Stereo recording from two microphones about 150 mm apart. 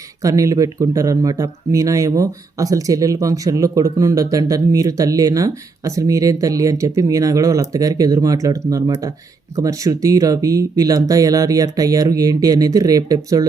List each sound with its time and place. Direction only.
0.2 s speech: 20° right (ahead or behind)